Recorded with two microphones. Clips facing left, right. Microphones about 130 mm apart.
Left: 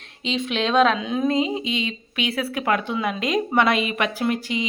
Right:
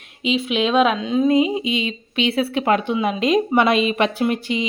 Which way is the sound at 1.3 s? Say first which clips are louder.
Right 5 dB; 15° right (ahead or behind).